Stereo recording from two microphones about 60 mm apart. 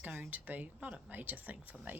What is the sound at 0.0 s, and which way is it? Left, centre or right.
Speech, right.